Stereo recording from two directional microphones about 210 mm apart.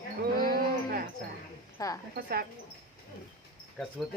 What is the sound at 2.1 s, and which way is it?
Speech, 45° right (ahead or behind).